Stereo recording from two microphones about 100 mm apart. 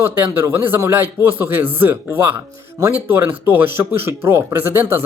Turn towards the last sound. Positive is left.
turn(degrees=-25)  # may be behind; listen again after turning